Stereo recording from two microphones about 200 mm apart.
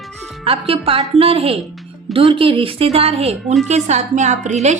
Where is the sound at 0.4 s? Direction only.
30° right (ahead or behind).